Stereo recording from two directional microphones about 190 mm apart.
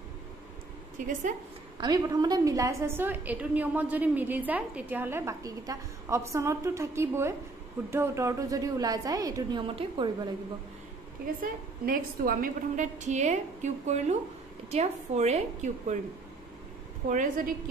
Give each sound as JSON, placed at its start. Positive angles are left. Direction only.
{"t": 0.9, "sound": "a woman's voice", "side_deg": -40}
{"t": 1.8, "sound": "a woman's voice", "side_deg": -20}
{"t": 11.8, "sound": "a woman's voice", "side_deg": -50}